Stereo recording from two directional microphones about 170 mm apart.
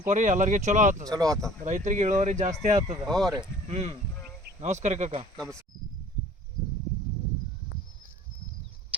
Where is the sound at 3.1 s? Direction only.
Centre (ahead or behind).